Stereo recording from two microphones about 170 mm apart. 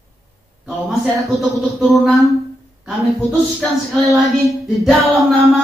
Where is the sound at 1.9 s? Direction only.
Centre (ahead or behind).